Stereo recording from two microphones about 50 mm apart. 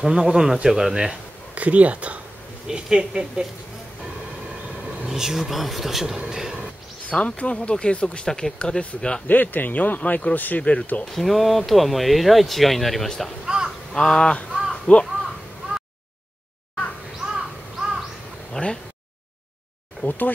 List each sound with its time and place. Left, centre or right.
0.0 s speech: centre
1.1 s a sound: right
2.7 s speech: centre
5.0 s speech: centre
7.1 s speech: left
9.3 s speech: left
11.1 s speech: centre
13.5 s a sound: centre
13.9 s speech: centre
15.0 s crow: centre
17.2 s crow: centre
18.5 s a sound: centre
20.0 s speech: left